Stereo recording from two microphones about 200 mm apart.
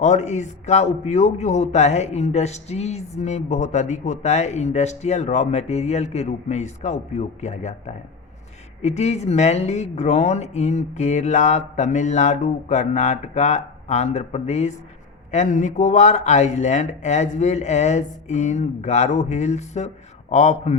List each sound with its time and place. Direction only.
0.0 s a man's voice: 35° left (ahead or behind)
8.8 s a man's voice: 35° left (ahead or behind)